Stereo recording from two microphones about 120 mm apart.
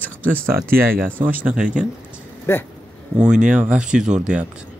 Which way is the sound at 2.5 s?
20° left (ahead or behind).